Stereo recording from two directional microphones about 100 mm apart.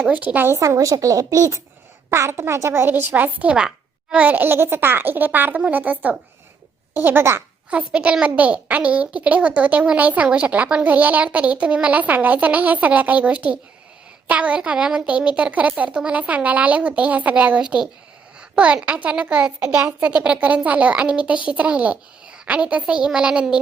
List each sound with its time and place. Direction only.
0.1 s a child's voice: 15° right (ahead or behind)
0.6 s a child's voice: 35° right (ahead or behind); by 23.6 s 10° right (ahead or behind)